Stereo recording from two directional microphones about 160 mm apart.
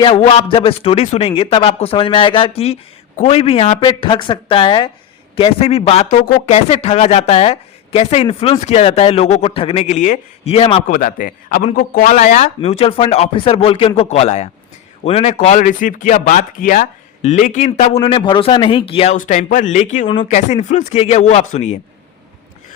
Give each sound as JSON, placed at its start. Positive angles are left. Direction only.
{"t": 0.0, "sound": "speech", "side_deg": 35}
{"t": 10.8, "sound": "speech", "side_deg": 55}
{"t": 18.0, "sound": "speech", "side_deg": 35}
{"t": 19.1, "sound": "speech", "side_deg": 55}